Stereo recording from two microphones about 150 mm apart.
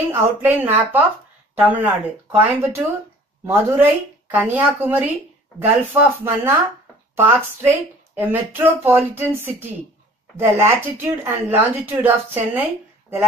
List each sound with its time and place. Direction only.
0.1 s speech: 15° right (ahead or behind)
10.3 s speech: 15° right (ahead or behind)